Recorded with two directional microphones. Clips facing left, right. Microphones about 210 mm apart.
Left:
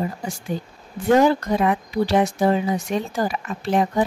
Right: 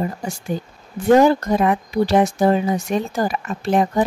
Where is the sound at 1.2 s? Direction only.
45° right (ahead or behind).